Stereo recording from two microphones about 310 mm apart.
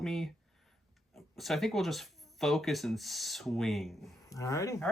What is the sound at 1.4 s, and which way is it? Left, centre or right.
Speech, centre.